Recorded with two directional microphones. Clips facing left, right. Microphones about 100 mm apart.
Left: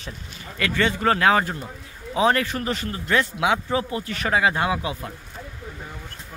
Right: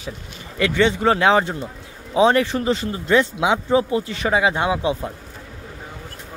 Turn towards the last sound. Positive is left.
turn(degrees=-20)  # may be behind; listen again after turning